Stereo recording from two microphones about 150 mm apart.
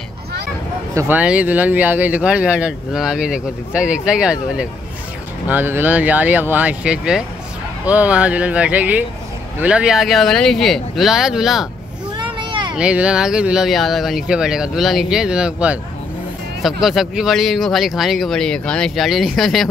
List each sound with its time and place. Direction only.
0.9 s speech: 10° right (ahead or behind)
12.2 s vehicle: 35° right (ahead or behind)
12.7 s speech: 5° right (ahead or behind)
16.8 s speech: centre (ahead or behind)